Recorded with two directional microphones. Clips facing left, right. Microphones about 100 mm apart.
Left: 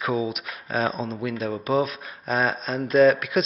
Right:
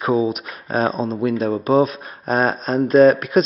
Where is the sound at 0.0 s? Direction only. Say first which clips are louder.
Right 7 dB; 35° right (ahead or behind).